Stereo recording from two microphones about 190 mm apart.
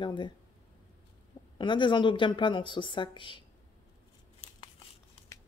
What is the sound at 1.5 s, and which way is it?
A woman's voice, 25° left (ahead or behind).